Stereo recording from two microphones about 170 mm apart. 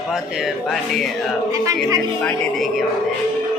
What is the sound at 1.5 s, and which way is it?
Music, 20° right (ahead or behind).